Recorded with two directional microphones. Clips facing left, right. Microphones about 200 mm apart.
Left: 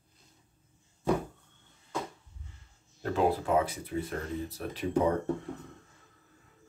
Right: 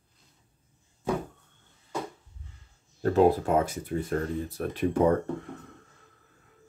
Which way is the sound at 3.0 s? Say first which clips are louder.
Right 6 dB; 45° right (ahead or behind).